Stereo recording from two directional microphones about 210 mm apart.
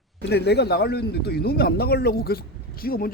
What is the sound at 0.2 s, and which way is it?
Speech, 50° left (ahead or behind).